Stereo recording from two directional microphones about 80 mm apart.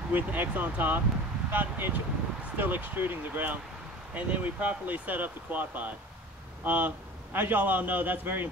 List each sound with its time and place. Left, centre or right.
0.1 s speech: right